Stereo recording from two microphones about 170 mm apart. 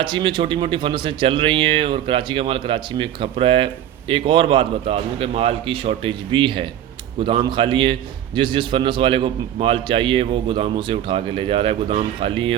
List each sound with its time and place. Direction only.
0.0 s a man's voice: 30° right (ahead or behind)